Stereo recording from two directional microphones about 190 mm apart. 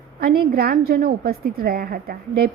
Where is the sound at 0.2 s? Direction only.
50° right (ahead or behind).